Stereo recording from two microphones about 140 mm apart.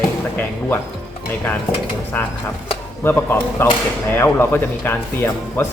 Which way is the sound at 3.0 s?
15° left (ahead or behind).